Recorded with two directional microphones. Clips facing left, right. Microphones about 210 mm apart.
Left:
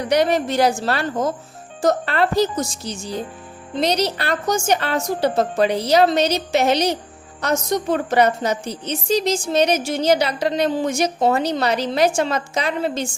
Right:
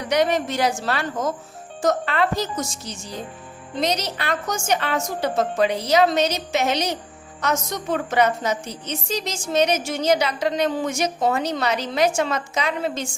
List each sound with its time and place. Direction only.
0.1 s a woman's voice: 35° left (ahead or behind)